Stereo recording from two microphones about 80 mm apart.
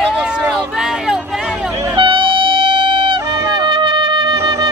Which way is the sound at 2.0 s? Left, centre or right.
Right.